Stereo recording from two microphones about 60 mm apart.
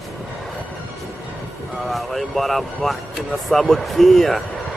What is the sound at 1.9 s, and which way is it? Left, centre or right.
Speech, centre.